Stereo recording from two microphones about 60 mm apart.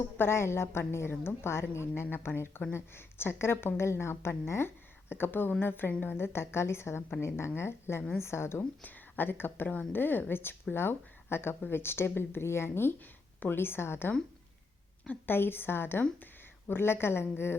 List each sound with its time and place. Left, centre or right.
0.2 s a woman's voice: left
8.8 s a woman's voice: left
15.0 s a woman's voice: left
15.4 s a woman's voice: left